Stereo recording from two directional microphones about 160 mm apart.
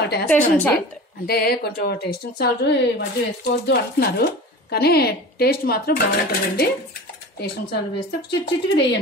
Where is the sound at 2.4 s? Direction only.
90° left; by 6.0 s 70° left (ahead or behind).